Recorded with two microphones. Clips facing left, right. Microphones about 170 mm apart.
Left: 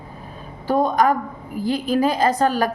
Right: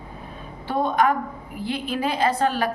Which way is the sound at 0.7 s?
40° left (ahead or behind).